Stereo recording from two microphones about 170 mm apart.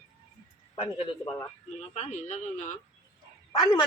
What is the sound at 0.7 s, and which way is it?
A man's voice, 35° left (ahead or behind).